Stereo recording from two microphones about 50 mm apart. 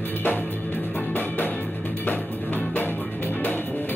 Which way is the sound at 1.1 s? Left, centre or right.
Left.